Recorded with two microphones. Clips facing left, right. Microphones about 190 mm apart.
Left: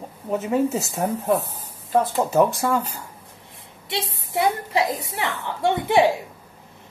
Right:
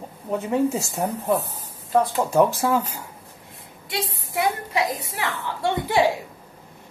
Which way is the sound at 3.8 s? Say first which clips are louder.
Even; 25° left (ahead or behind).